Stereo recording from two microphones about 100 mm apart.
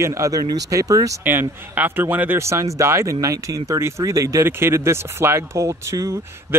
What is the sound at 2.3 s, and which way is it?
Speech, 30° right (ahead or behind).